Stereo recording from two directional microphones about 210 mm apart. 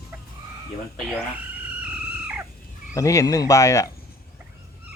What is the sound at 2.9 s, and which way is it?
Speech, 15° left (ahead or behind).